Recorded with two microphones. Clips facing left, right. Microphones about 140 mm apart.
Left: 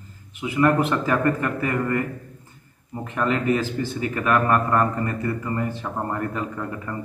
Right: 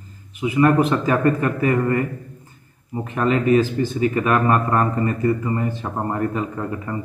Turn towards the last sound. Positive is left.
turn(degrees=-10)  # may be behind; listen again after turning